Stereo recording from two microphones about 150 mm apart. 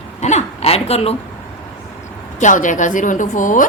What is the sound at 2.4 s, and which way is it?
Speech, 55° left (ahead or behind).